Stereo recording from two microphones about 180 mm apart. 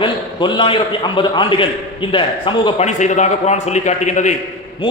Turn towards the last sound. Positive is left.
turn(degrees=40)  # may be behind; listen again after turning